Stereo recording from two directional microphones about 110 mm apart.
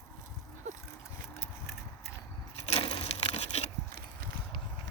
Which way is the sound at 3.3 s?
80° left.